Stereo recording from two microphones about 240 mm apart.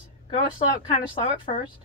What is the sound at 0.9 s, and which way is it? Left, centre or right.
Speech, left.